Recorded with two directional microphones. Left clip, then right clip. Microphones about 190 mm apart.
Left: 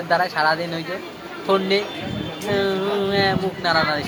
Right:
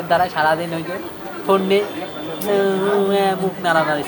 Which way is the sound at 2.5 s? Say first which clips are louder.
Right 4 dB; 15° left (ahead or behind).